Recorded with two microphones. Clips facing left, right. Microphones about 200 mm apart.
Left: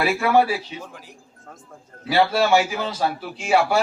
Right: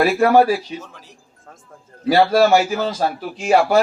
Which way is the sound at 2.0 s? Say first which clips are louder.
Right 5 dB; 40° right (ahead or behind).